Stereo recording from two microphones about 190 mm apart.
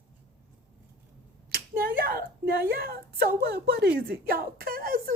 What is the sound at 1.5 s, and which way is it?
Speech, 50° right (ahead or behind).